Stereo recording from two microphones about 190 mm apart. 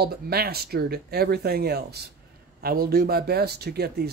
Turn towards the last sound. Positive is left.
turn(degrees=-55)  # may be behind; listen again after turning